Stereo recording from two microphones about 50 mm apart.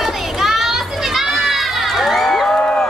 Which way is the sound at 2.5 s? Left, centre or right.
Centre.